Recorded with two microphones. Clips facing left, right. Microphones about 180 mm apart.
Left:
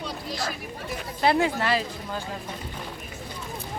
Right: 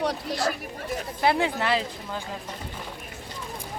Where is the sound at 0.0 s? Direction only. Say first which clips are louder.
Right 6 dB; 80° right.